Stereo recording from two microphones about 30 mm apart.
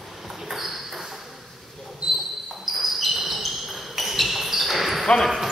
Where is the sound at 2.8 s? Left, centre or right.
Centre.